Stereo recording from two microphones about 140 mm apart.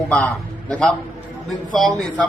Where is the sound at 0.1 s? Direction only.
10° left (ahead or behind).